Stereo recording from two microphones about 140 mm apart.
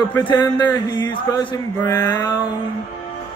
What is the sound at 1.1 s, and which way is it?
Mantra, 25° left (ahead or behind).